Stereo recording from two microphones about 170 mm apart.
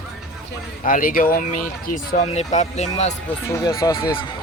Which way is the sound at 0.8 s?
55° left (ahead or behind).